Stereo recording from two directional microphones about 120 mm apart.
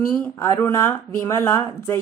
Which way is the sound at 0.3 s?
20° left (ahead or behind).